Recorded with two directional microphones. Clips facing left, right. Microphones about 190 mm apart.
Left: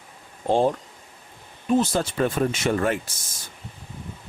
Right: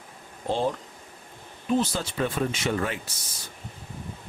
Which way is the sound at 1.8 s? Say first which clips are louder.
Left 5 dB; 50° left (ahead or behind).